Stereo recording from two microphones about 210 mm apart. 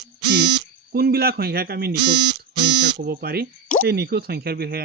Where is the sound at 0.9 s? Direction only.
50° right (ahead or behind).